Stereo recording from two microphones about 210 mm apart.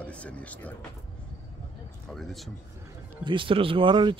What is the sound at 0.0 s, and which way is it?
Speech, 5° left (ahead or behind).